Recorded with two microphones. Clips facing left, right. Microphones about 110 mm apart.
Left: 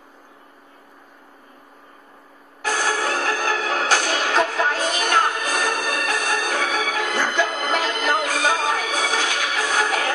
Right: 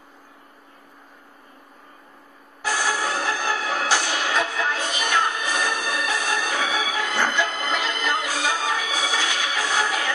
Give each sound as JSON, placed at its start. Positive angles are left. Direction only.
{"t": 2.6, "sound": "music", "side_deg": 50}